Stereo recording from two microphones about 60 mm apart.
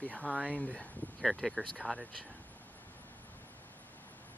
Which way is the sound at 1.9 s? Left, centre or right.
Centre.